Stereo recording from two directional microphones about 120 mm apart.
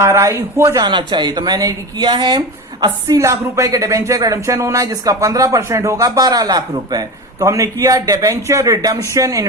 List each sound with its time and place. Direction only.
0.0 s speech: 25° right (ahead or behind)
2.8 s speech: 25° right (ahead or behind)